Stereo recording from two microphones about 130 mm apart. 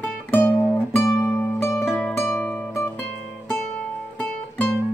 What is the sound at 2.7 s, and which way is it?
Music, 20° left (ahead or behind).